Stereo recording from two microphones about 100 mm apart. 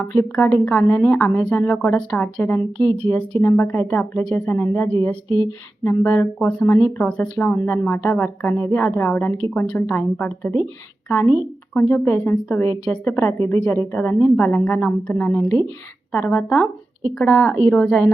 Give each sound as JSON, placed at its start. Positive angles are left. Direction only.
{"t": 0.3, "sound": "a woman's voice", "side_deg": 10}
{"t": 4.4, "sound": "speech", "side_deg": 25}
{"t": 12.8, "sound": "a woman's voice", "side_deg": 10}
{"t": 13.1, "sound": "a woman's voice", "side_deg": 25}